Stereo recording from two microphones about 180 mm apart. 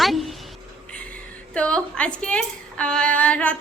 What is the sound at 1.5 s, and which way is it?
A woman's voice, 5° left (ahead or behind).